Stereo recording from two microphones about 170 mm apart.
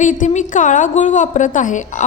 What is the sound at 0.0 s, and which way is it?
A woman's voice, 45° left (ahead or behind).